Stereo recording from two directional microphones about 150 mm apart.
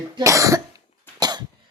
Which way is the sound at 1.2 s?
30° right (ahead or behind).